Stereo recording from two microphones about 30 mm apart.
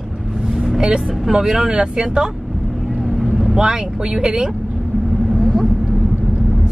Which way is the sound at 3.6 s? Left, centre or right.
Right.